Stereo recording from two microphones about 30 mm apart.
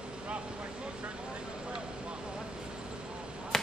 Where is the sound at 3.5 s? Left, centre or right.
Centre.